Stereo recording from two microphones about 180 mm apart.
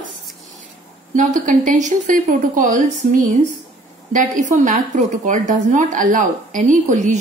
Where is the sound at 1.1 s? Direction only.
45° right (ahead or behind).